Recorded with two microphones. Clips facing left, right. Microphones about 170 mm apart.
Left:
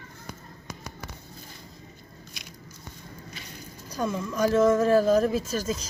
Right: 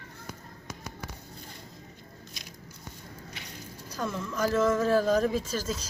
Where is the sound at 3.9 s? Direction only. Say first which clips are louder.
Left 4 dB; 15° left (ahead or behind).